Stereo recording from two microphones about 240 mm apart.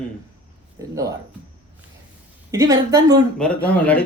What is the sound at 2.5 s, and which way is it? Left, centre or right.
Speech, centre.